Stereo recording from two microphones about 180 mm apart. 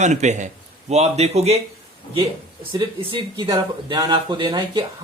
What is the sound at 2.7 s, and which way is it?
Speech, 25° right (ahead or behind).